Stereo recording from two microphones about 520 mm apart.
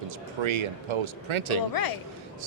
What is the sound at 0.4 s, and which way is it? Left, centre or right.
Speech, right.